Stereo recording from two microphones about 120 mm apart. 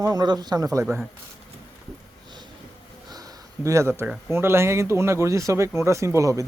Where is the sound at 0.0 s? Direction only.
35° right (ahead or behind).